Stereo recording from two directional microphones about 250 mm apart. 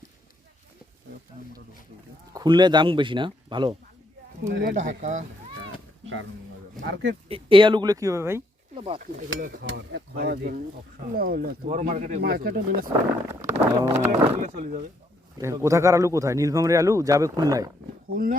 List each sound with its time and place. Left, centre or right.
2.3 s speech: centre
4.5 s speech: right
6.8 s speech: right
7.3 s a man's voice: right
8.7 s speech: right
13.4 s speech: centre
14.4 s speech: right
15.4 s a man's voice: centre
18.1 s speech: right